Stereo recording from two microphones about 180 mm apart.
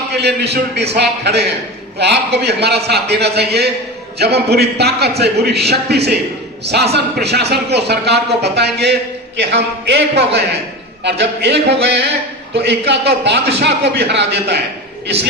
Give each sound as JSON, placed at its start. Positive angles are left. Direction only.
{"t": 0.1, "sound": "a man's voice", "side_deg": -65}